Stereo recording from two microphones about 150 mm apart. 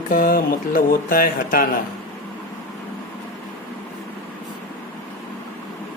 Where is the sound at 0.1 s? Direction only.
70° left (ahead or behind).